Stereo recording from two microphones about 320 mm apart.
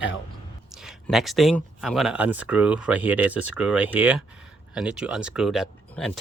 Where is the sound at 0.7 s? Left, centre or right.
Centre.